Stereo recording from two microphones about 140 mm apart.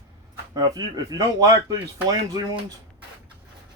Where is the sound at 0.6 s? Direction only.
30° right (ahead or behind).